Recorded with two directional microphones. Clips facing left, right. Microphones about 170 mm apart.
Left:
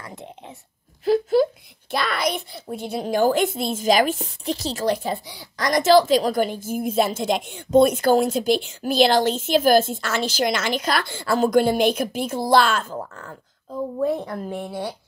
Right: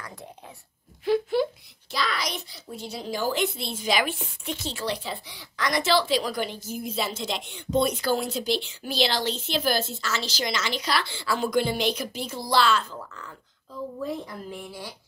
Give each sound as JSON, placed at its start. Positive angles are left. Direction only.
{"t": 0.0, "sound": "chewing", "side_deg": 20}
{"t": 1.0, "sound": "a sound", "side_deg": 40}
{"t": 1.9, "sound": "a woman's voice", "side_deg": 55}